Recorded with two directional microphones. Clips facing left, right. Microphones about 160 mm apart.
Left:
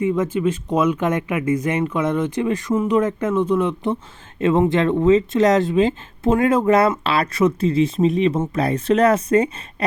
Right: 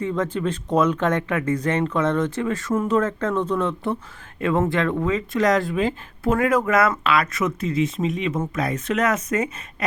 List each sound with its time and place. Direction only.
0.0 s speech: 10° left (ahead or behind); by 9.5 s 30° left (ahead or behind)